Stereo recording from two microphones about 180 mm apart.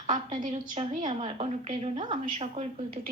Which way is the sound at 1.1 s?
35° right (ahead or behind).